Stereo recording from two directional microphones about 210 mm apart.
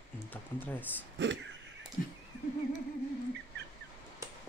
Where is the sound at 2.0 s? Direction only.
40° left (ahead or behind).